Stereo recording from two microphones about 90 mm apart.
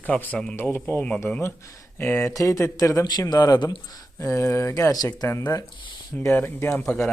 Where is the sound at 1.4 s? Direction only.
35° left (ahead or behind).